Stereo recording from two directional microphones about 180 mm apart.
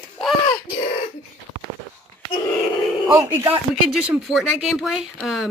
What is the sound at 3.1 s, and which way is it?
Speech, 10° right (ahead or behind).